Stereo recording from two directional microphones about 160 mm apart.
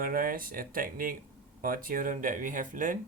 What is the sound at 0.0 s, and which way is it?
Speech, 60° right (ahead or behind).